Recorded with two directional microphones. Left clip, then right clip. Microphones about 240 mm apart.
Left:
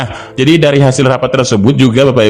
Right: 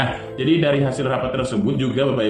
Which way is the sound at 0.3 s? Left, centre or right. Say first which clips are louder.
Left 10 dB; left.